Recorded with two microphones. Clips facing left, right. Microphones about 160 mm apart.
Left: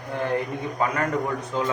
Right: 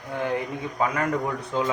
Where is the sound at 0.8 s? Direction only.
5° right (ahead or behind).